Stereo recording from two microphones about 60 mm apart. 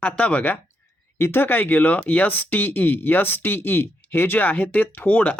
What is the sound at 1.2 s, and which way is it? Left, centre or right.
Speech, left.